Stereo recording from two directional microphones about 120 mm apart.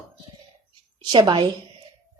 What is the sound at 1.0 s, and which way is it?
Speech, 40° right (ahead or behind).